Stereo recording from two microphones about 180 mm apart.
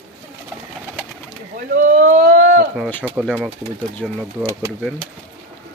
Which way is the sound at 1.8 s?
45° right (ahead or behind).